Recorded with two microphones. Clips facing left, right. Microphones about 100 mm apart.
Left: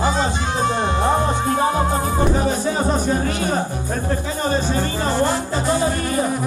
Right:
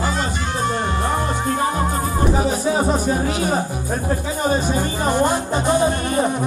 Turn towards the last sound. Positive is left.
turn(degrees=-20)  # may be behind; listen again after turning